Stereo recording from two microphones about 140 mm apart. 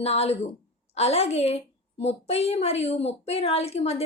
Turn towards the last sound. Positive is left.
turn(degrees=45)  # may be behind; listen again after turning